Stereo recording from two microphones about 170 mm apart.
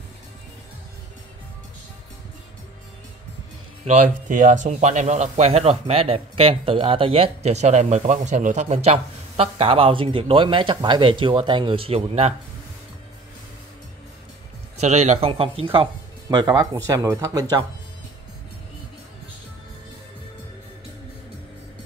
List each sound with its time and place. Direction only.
3.8 s speech: 45° right (ahead or behind)
14.8 s speech: 40° right (ahead or behind); by 17.6 s 20° right (ahead or behind)